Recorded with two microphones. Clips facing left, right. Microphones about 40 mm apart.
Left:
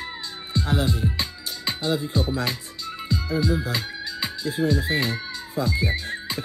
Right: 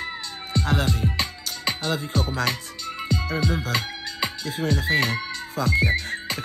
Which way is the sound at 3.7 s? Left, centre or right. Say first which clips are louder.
Right 1 dB; right.